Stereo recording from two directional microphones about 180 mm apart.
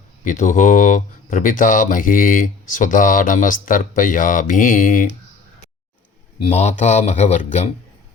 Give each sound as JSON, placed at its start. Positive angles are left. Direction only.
{"t": 0.3, "sound": "speech", "side_deg": 45}
{"t": 6.4, "sound": "speech", "side_deg": 40}